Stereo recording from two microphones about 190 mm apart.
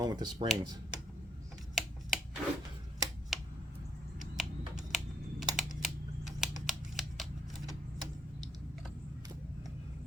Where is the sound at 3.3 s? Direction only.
Centre (ahead or behind).